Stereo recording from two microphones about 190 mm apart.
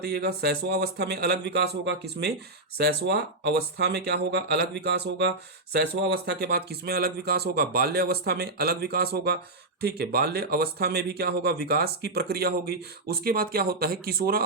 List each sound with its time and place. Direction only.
0.0 s speech: 60° right (ahead or behind)